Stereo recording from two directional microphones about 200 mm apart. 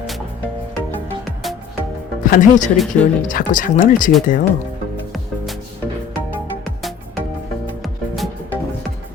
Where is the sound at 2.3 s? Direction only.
40° left (ahead or behind).